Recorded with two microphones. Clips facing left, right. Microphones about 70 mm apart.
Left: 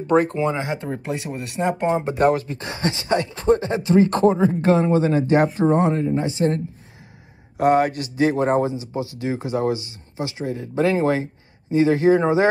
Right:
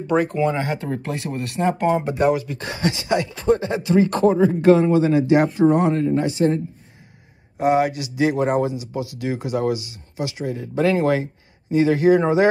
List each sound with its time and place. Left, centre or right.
0.0 s speech: left
0.4 s speech: left
2.1 s speech: left
7.7 s speech: left